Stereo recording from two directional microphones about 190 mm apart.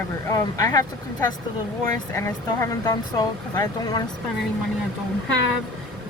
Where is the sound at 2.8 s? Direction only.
20° left (ahead or behind).